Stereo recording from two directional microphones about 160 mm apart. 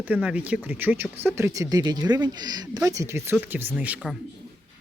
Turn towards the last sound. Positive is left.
turn(degrees=-10)  # may be behind; listen again after turning